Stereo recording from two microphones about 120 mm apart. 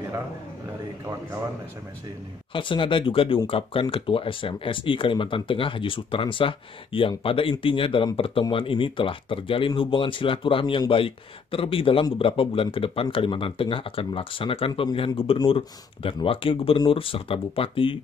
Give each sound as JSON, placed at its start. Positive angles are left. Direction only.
{"t": 2.5, "sound": "speech", "side_deg": 45}